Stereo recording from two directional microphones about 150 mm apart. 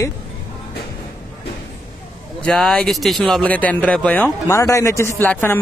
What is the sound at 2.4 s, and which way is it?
Speech, 5° left (ahead or behind).